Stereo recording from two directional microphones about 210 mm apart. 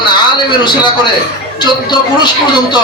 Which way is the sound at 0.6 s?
20° left (ahead or behind).